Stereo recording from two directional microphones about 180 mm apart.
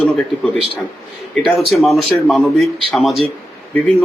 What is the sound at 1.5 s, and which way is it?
A man's voice, centre (ahead or behind).